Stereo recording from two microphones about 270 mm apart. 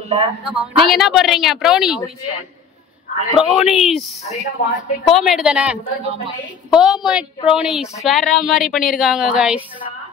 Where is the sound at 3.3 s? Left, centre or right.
Centre.